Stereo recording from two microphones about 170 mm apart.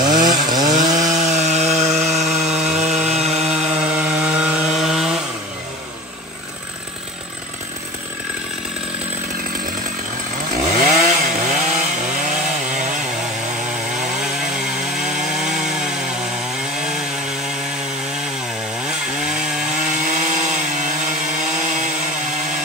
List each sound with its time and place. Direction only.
0.0 s wood: 25° right (ahead or behind)
1.2 s sawing: 40° right (ahead or behind)
2.4 s sawing: 5° right (ahead or behind)
2.8 s sawing: 40° right (ahead or behind)
3.5 s sawing: 5° right (ahead or behind)
10.6 s chainsaw: 45° right (ahead or behind)
14.5 s wood: 5° right (ahead or behind)
18.9 s chainsaw: 5° right (ahead or behind)
19.7 s wood: 45° right (ahead or behind)